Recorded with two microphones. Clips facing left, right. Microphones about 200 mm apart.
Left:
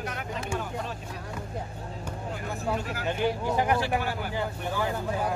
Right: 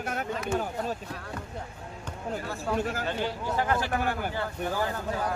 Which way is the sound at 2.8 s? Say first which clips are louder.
Right 4 dB; 45° right (ahead or behind).